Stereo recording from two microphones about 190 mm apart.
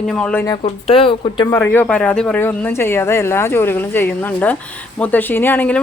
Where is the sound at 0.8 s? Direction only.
30° left (ahead or behind).